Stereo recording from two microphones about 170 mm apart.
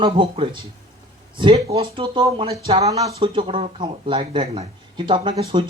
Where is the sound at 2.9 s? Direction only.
25° right (ahead or behind).